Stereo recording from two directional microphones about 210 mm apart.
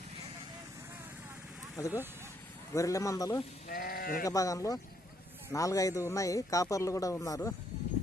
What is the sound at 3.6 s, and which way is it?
Speech, 45° left (ahead or behind).